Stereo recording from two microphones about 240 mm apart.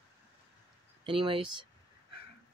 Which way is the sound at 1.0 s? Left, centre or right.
Right.